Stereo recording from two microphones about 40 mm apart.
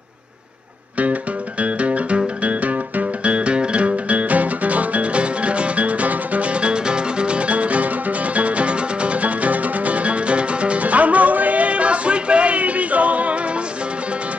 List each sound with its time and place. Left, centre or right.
1.6 s music: right